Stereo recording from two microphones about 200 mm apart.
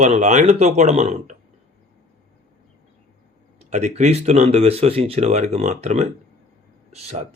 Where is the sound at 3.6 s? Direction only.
35° right (ahead or behind).